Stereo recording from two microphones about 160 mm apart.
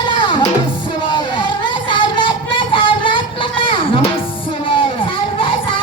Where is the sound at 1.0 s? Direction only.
30° left (ahead or behind).